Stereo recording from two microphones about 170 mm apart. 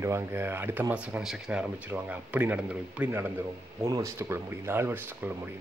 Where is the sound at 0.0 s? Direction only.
15° right (ahead or behind).